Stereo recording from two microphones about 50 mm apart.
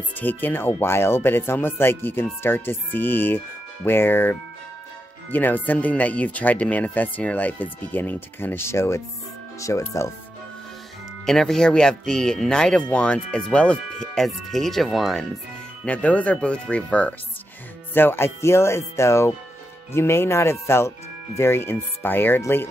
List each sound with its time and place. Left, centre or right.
0.2 s speech: left
8.5 s speech: left
9.6 s speech: left
11.2 s speech: centre; by 13.7 s left
13.9 s speech: centre
15.8 s speech: left
17.9 s speech: left
19.9 s speech: left